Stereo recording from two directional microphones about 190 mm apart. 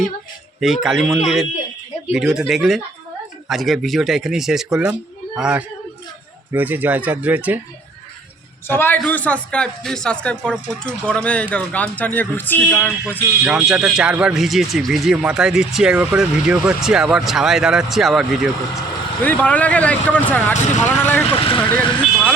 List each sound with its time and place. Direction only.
0.6 s speech: centre (ahead or behind)
8.6 s speech: 10° left (ahead or behind)
13.4 s speech: 5° right (ahead or behind)
21.2 s speech: 30° left (ahead or behind)
21.7 s speech: 5° left (ahead or behind)